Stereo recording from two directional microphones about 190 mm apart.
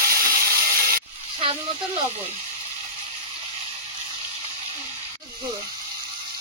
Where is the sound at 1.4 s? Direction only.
30° right (ahead or behind).